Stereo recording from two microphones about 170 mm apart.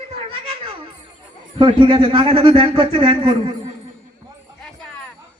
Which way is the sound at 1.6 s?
30° right (ahead or behind).